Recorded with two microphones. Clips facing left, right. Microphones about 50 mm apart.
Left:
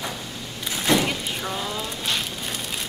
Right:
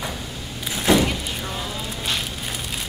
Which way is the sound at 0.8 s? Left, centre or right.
Centre.